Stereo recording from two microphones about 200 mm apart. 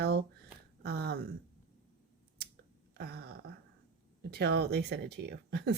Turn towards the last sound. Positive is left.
turn(degrees=-55)  # may be behind; listen again after turning